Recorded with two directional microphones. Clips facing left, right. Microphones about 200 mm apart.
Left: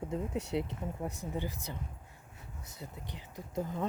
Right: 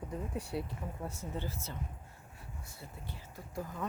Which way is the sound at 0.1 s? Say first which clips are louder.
Left 4 dB; 20° left (ahead or behind).